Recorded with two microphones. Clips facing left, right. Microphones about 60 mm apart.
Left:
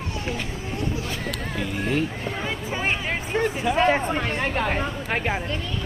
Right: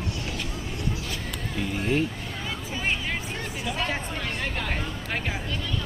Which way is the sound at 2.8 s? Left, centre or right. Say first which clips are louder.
Left 1 dB; left.